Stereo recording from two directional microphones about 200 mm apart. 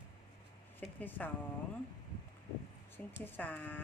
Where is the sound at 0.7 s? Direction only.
10° left (ahead or behind).